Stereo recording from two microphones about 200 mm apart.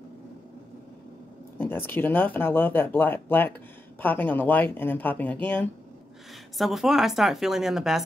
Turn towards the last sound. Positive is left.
turn(degrees=0)  # may be behind; listen again after turning